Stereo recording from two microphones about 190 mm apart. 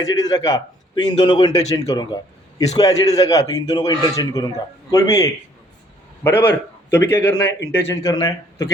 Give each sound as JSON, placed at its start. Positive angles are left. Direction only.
{"t": 0.2, "sound": "a man's voice", "side_deg": 20}
{"t": 7.6, "sound": "a man's voice", "side_deg": 70}
{"t": 8.0, "sound": "speech", "side_deg": 20}